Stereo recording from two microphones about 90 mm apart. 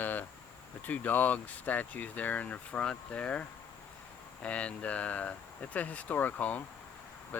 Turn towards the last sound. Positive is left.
turn(degrees=15)  # may be behind; listen again after turning